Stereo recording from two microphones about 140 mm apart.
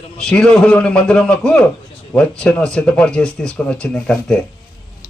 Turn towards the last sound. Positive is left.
turn(degrees=10)  # may be behind; listen again after turning